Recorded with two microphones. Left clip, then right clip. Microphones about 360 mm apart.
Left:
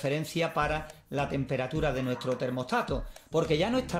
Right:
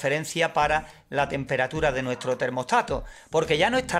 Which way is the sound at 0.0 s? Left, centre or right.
Centre.